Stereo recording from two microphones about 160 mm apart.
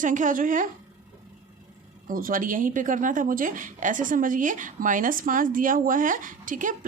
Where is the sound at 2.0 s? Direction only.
60° right (ahead or behind).